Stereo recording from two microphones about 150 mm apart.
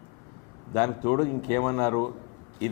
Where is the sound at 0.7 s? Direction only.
20° left (ahead or behind).